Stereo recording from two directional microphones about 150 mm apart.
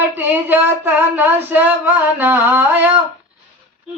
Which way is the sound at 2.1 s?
15° right (ahead or behind).